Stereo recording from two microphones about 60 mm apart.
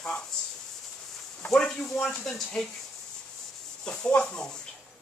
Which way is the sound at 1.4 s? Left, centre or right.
Centre.